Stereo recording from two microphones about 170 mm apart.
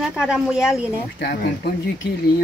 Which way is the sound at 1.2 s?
75° left (ahead or behind).